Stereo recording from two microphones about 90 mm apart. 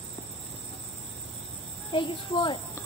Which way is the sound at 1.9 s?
65° left (ahead or behind).